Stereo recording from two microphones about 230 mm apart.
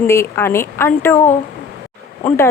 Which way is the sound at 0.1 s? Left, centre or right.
Centre.